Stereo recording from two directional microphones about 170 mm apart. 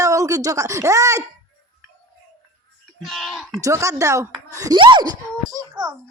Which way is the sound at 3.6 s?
20° right (ahead or behind).